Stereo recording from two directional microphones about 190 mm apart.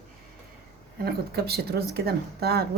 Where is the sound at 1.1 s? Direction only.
55° right (ahead or behind).